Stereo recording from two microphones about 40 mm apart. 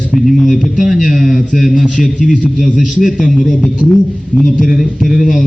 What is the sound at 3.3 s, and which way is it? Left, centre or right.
Speech, centre.